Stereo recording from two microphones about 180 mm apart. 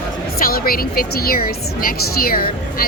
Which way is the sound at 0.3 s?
55° left (ahead or behind).